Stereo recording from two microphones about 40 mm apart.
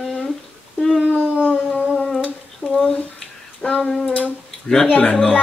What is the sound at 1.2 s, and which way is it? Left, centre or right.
Howl, right.